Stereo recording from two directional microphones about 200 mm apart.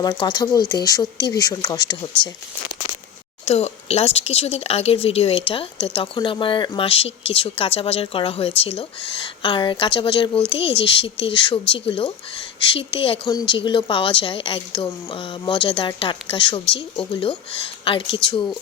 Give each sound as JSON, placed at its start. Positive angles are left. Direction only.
{"t": 0.0, "sound": "speech", "side_deg": 20}
{"t": 3.4, "sound": "speech", "side_deg": 30}